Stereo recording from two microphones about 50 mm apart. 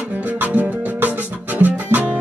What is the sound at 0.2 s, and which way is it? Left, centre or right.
Music, right.